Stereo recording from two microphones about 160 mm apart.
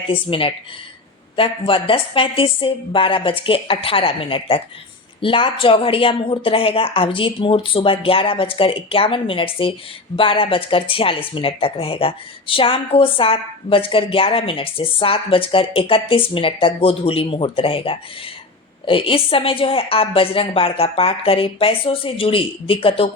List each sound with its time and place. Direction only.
0.1 s speech: 35° left (ahead or behind)